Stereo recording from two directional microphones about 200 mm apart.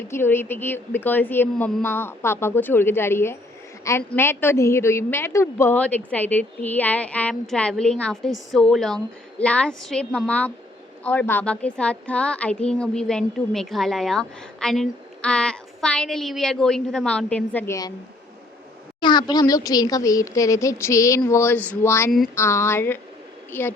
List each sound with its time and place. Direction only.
0.1 s a woman's voice: 10° left (ahead or behind)
18.9 s a woman's voice: 20° left (ahead or behind)